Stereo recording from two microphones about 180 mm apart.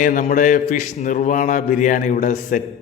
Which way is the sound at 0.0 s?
45° left (ahead or behind).